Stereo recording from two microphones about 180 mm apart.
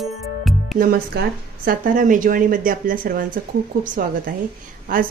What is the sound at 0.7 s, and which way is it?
A woman's voice, 55° right (ahead or behind).